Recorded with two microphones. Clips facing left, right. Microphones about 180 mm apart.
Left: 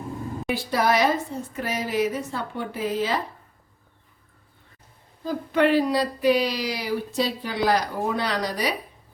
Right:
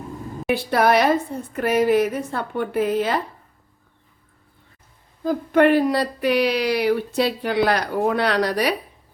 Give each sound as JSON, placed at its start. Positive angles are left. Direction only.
{"t": 0.5, "sound": "speech", "side_deg": -60}
{"t": 5.2, "sound": "speech", "side_deg": -50}